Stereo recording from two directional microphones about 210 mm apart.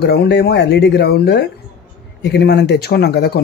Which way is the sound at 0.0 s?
50° left (ahead or behind).